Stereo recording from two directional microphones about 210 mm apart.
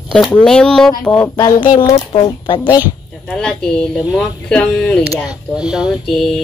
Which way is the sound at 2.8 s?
Centre (ahead or behind).